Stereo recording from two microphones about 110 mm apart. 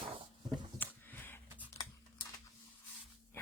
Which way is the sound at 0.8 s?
20° left (ahead or behind).